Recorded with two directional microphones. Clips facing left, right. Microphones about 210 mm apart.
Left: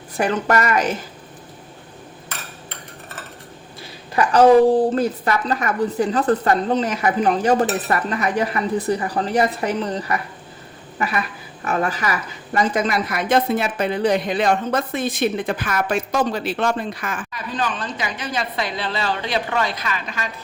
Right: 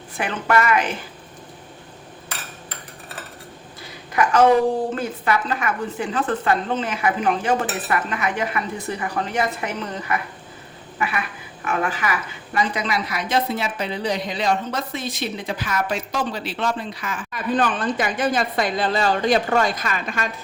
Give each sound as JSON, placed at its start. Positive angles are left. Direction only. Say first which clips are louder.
{"t": 0.2, "sound": "a woman's voice", "louder": "left 2 dB", "side_deg": 40}
{"t": 4.1, "sound": "a sound", "louder": "left 2 dB", "side_deg": 35}
{"t": 4.9, "sound": "a woman's voice", "louder": "left 3 dB", "side_deg": 40}
{"t": 11.6, "sound": "a woman's voice", "louder": "left 2 dB", "side_deg": 40}
{"t": 17.3, "sound": "a woman's voice", "louder": "right 7 dB", "side_deg": -55}